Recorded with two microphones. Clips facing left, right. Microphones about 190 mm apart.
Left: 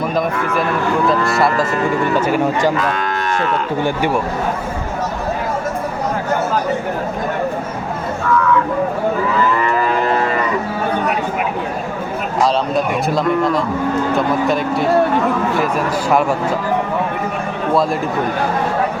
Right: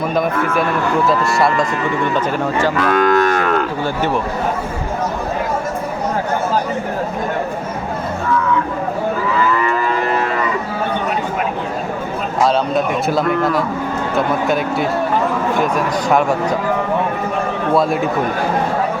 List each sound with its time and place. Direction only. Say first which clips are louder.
1.0 s speech: even; centre (ahead or behind)
2.9 s moo: right 7 dB; 50° right (ahead or behind)
3.8 s speech: left 1 dB; 15° left (ahead or behind)
12.4 s speech: right 1 dB; centre (ahead or behind)